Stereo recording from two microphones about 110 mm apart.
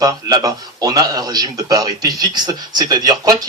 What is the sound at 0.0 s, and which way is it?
A man's voice, 35° right (ahead or behind).